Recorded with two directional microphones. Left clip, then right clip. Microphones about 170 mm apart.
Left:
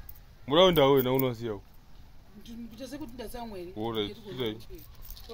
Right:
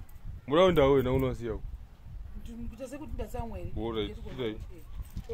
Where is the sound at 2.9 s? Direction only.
20° right (ahead or behind).